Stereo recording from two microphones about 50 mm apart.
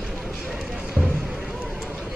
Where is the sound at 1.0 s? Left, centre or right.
Right.